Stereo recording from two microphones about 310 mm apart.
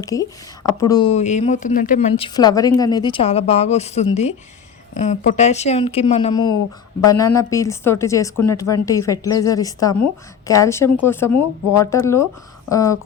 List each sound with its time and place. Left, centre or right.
0.0 s a woman's voice: centre